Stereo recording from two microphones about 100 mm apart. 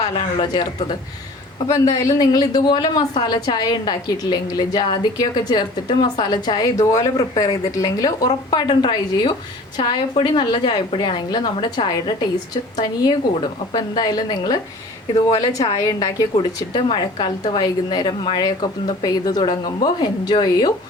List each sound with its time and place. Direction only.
0.0 s a woman's voice: 50° left (ahead or behind)
1.5 s a woman's voice: 35° left (ahead or behind)
16.4 s a woman's voice: 50° left (ahead or behind)